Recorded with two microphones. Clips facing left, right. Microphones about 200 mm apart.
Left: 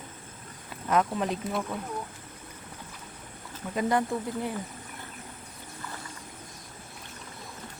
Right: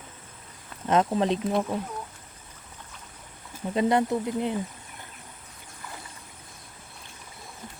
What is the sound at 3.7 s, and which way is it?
Speech, 25° right (ahead or behind).